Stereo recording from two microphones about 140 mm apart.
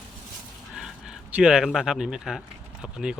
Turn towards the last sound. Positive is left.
turn(degrees=-5)  # may be behind; listen again after turning